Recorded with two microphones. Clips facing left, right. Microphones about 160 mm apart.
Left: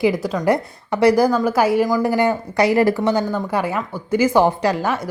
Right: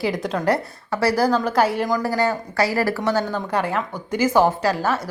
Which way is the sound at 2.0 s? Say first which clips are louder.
Left 4 dB; 15° left (ahead or behind).